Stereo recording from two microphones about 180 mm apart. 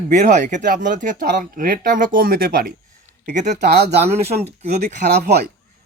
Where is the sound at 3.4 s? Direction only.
70° right (ahead or behind).